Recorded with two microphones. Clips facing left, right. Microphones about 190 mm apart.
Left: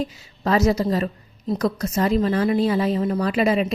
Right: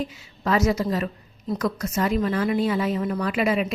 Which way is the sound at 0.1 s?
35° left (ahead or behind).